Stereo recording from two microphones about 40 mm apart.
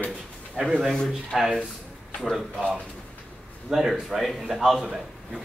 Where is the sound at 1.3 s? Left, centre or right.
Centre.